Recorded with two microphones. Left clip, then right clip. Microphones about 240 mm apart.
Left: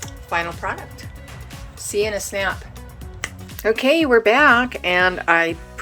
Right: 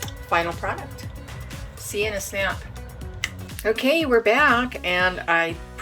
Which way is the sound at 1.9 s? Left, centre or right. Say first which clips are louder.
Left 4 dB; left.